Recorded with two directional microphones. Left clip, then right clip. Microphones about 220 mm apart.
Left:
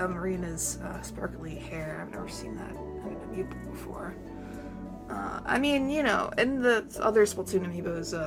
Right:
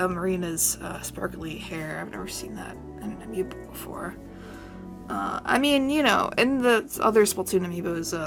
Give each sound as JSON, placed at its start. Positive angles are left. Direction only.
{"t": 0.0, "sound": "speech", "side_deg": -40}
{"t": 5.1, "sound": "speech", "side_deg": -40}